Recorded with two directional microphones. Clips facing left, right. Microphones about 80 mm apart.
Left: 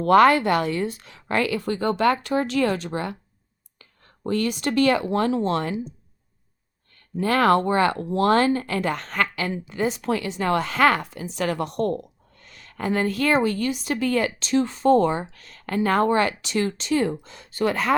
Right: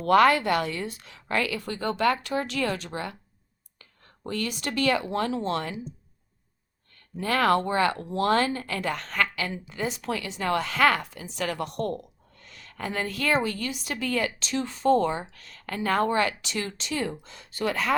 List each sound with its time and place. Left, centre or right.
0.0 s speech: left
4.3 s speech: left
7.2 s speech: left